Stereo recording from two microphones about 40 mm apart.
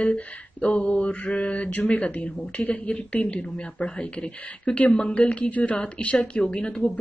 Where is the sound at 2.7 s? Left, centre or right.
Left.